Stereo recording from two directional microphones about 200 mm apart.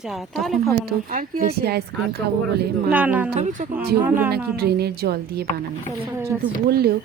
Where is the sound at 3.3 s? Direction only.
35° right (ahead or behind).